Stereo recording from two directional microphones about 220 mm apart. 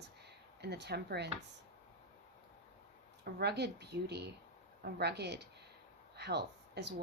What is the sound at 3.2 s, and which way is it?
Speech, 50° right (ahead or behind).